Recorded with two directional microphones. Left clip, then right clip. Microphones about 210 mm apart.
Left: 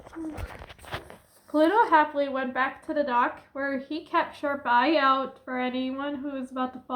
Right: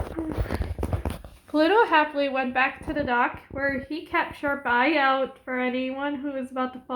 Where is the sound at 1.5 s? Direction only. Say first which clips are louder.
Right 1 dB; 40° right (ahead or behind).